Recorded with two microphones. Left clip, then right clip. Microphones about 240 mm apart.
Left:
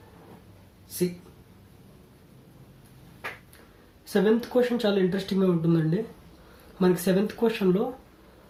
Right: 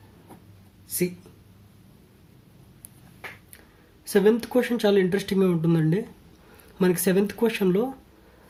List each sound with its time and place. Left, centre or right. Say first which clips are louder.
4.0 s speech: right 3 dB; right